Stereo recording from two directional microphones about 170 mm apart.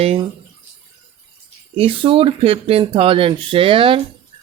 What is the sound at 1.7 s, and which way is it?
Speech, 35° right (ahead or behind).